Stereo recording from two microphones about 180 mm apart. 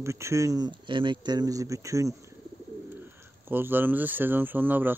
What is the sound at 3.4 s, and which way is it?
Speech, 10° right (ahead or behind).